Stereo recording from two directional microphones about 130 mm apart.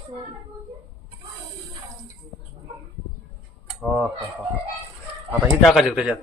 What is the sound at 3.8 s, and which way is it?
Speech, centre (ahead or behind).